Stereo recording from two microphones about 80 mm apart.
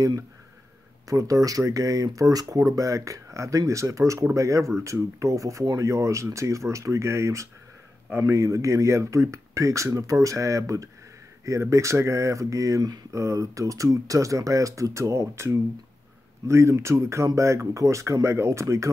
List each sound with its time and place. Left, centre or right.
1.0 s speech: right